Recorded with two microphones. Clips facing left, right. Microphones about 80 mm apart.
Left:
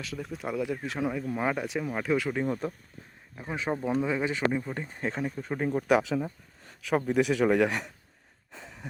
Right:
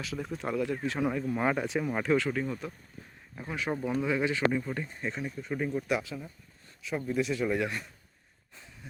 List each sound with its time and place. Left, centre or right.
0.0 s speech: centre
2.1 s speech: centre
2.5 s speech: left
3.4 s speech: left
4.9 s speech: left
5.9 s speech: left
8.5 s a sound: left